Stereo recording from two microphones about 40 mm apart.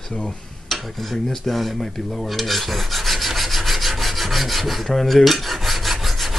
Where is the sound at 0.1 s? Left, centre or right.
Centre.